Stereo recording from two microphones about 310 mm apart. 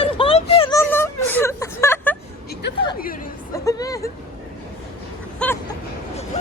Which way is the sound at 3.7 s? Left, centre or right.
Centre.